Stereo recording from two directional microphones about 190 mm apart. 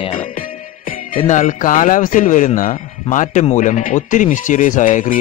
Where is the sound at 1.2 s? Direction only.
40° left (ahead or behind).